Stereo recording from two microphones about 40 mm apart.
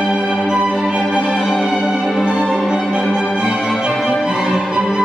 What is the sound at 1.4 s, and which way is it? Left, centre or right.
Music, centre.